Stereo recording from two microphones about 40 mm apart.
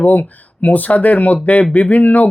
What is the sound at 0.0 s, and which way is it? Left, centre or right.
Speech, left.